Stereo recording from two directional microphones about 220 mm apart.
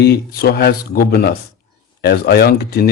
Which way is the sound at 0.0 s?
45° left (ahead or behind).